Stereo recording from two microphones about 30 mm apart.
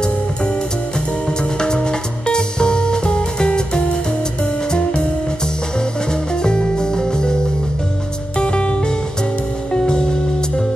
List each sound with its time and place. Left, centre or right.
1.6 s music: left
6.3 s music: left
8.4 s music: left